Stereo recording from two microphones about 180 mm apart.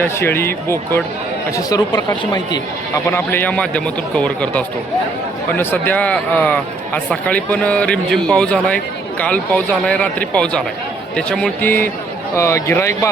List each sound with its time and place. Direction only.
0.0 s a man's voice: 10° left (ahead or behind)
3.1 s a man's voice: 10° left (ahead or behind)